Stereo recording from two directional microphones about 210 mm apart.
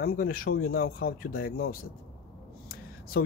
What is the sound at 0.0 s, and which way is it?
Speech, 45° left (ahead or behind).